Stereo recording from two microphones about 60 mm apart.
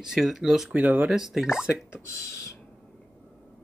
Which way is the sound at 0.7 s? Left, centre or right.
Right.